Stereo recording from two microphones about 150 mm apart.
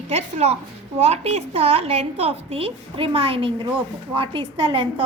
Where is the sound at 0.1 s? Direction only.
45° right (ahead or behind).